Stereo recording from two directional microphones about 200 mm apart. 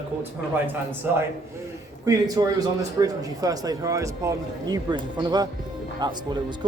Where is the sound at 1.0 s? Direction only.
10° right (ahead or behind).